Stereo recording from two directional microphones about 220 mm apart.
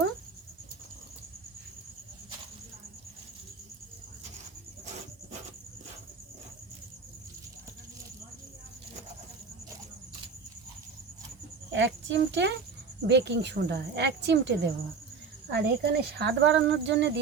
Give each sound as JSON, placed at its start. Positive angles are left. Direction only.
{"t": 11.7, "sound": "a woman's voice", "side_deg": -55}